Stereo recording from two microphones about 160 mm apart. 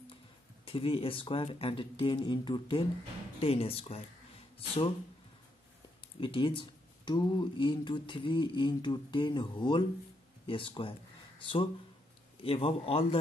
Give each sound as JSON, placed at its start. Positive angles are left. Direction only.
{"t": 0.7, "sound": "speech", "side_deg": 35}
{"t": 6.1, "sound": "speech", "side_deg": 35}